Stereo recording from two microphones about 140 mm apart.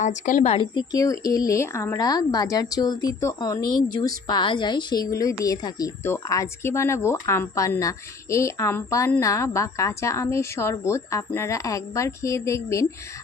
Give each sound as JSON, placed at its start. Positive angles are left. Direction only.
{"t": 0.0, "sound": "a woman's voice", "side_deg": 65}
{"t": 0.5, "sound": "speech", "side_deg": 35}